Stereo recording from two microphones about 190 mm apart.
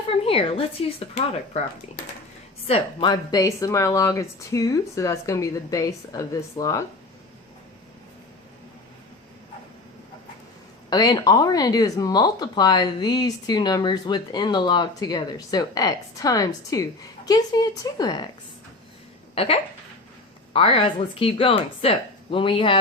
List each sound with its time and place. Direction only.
0.1 s speech: 30° left (ahead or behind)
2.6 s speech: 30° left (ahead or behind)
10.8 s speech: 20° left (ahead or behind)
19.3 s speech: 30° left (ahead or behind)